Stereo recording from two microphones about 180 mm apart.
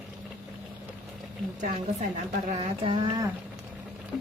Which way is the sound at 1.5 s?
40° right (ahead or behind).